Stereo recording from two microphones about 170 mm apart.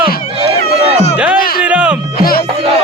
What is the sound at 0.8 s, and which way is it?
Run, 35° right (ahead or behind).